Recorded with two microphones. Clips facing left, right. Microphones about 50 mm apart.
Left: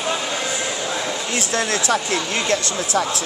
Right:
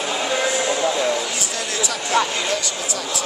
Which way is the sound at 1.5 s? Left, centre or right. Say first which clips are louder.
Left 8 dB; left.